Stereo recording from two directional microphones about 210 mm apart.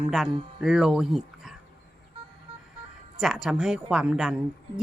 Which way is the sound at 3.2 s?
5° right (ahead or behind).